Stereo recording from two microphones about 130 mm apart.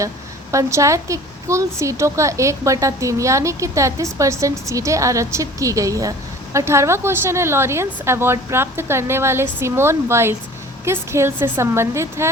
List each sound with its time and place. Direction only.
0.5 s a woman's voice: 25° right (ahead or behind)